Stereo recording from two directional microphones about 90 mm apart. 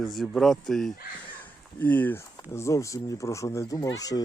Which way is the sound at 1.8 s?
20° left (ahead or behind).